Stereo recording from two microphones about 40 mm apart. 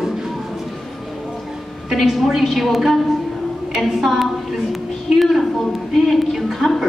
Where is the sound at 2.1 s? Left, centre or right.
Centre.